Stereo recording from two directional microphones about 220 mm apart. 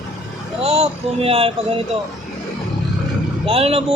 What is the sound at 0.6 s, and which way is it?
Speech, 25° right (ahead or behind).